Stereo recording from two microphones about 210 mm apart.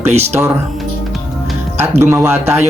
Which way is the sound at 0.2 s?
10° right (ahead or behind).